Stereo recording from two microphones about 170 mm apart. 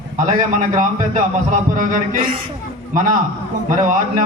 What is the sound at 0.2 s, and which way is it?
A man's voice, 50° right (ahead or behind).